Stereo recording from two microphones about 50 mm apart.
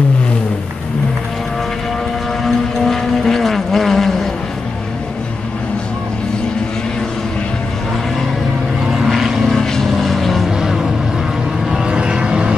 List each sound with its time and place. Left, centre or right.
2.4 s vehicle: centre
8.9 s vehicle: centre
9.5 s vehicle: centre
10.6 s music: centre
11.7 s vehicle: centre